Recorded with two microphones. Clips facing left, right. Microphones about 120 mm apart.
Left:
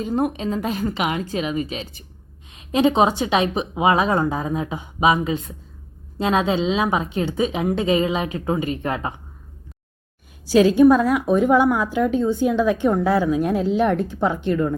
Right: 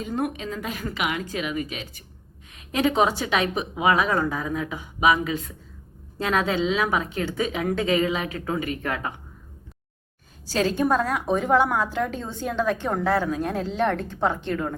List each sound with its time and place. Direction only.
0.0 s a woman's voice: 30° left (ahead or behind)
10.5 s a woman's voice: 10° left (ahead or behind)